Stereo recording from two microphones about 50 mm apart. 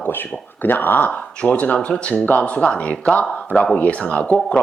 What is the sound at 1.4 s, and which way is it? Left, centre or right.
Speech, left.